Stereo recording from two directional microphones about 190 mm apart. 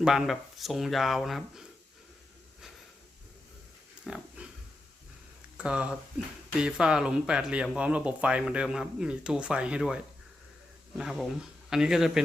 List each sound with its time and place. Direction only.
0.0 s speech: centre (ahead or behind)
4.0 s a sound: 5° right (ahead or behind)
5.5 s speech: 5° right (ahead or behind)